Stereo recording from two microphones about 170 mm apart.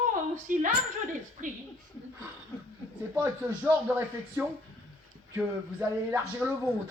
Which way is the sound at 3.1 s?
15° right (ahead or behind).